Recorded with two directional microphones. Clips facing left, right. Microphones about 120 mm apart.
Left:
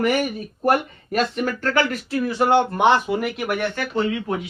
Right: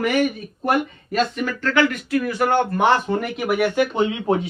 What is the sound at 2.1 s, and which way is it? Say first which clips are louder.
Speech: left 1 dB; 25° left (ahead or behind).